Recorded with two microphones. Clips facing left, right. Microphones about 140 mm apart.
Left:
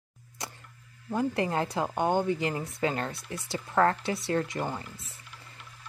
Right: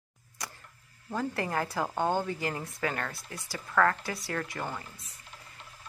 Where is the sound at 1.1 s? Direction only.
20° left (ahead or behind).